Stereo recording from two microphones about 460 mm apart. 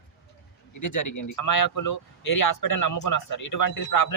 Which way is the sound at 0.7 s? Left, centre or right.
Left.